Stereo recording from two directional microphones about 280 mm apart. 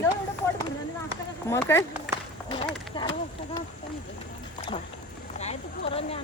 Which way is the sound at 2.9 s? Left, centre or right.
Centre.